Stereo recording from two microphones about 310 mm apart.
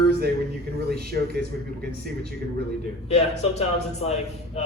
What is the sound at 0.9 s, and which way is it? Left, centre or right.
Speech, right.